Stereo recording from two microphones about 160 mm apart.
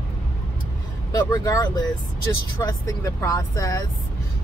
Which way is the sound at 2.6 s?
20° left (ahead or behind).